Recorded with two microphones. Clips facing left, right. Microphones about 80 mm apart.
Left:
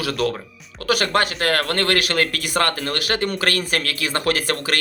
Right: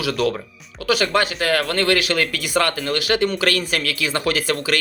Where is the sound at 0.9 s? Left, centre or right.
Left.